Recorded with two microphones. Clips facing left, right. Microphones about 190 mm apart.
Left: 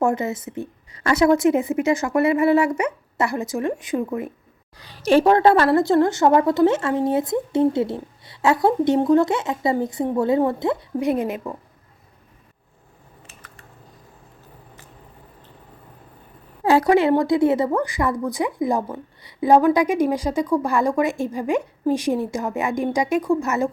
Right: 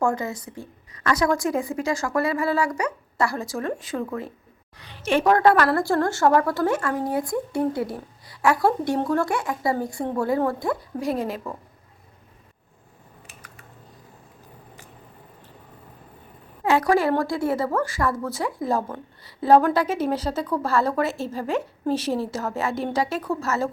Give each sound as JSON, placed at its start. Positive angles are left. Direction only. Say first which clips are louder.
{"t": 0.0, "sound": "a woman's voice", "louder": "left 3 dB", "side_deg": 20}
{"t": 4.8, "sound": "a woman's voice", "louder": "left 6 dB", "side_deg": 35}
{"t": 16.6, "sound": "a woman's voice", "louder": "left 4 dB", "side_deg": 30}
{"t": 16.9, "sound": "speech", "louder": "left 4 dB", "side_deg": 20}